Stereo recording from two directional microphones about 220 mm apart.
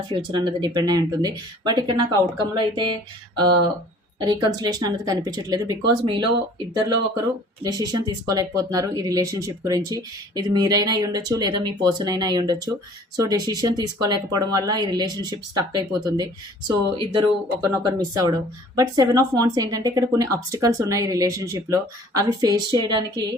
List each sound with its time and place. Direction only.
0.3 s speech: 20° right (ahead or behind)
7.6 s speech: 15° right (ahead or behind)